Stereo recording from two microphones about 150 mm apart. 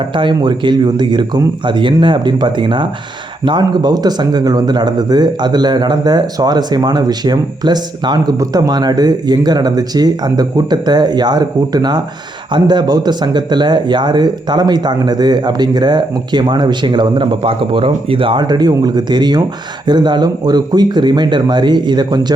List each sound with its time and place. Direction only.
0.2 s speech: 30° right (ahead or behind)